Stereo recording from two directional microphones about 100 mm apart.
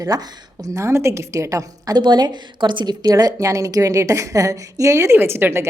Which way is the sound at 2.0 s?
45° right (ahead or behind).